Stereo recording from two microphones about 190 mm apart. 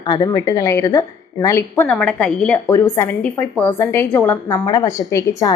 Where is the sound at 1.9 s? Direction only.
5° left (ahead or behind).